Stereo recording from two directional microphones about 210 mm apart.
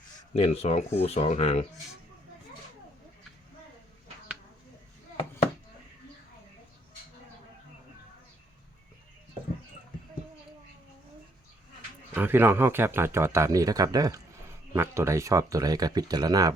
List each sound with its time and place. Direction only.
0.3 s speech: 30° left (ahead or behind)
12.1 s speech: 10° right (ahead or behind)